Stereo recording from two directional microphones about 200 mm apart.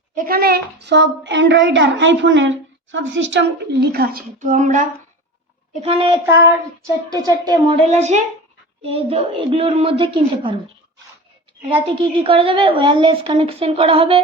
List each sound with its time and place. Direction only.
0.1 s a child's voice: 45° right (ahead or behind)
5.8 s a woman's voice: 25° right (ahead or behind)
7.9 s a woman's voice: 35° right (ahead or behind)
11.7 s a woman's voice: 25° right (ahead or behind)